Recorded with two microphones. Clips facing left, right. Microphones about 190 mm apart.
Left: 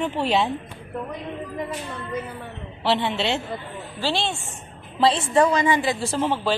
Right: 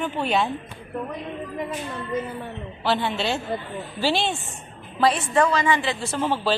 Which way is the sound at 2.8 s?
25° left (ahead or behind).